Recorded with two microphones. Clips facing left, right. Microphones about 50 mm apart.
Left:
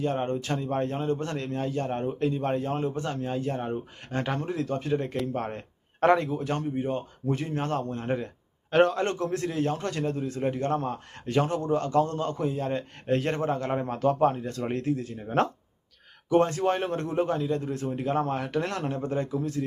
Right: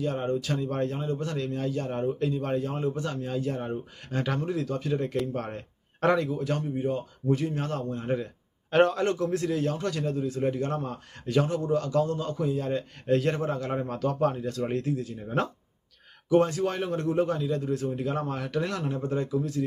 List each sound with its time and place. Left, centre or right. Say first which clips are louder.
0.0 s a man's voice: even; left
0.9 s a man's voice: left 2 dB; left
8.7 s a man's voice: even; centre
9.0 s a man's voice: right 1 dB; left